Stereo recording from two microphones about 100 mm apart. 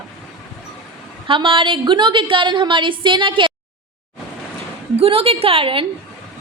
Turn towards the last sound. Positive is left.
turn(degrees=-60)  # may be behind; listen again after turning